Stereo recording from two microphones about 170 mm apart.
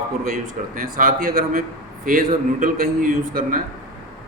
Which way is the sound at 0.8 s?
55° right (ahead or behind).